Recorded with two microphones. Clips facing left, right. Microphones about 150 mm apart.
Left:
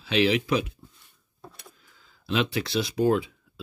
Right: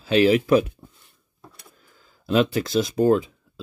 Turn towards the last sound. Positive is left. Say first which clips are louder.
# right 4 dB
turn(degrees=-40)  # may be behind; listen again after turning